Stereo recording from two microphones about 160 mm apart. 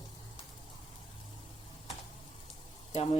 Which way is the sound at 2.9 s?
40° left (ahead or behind).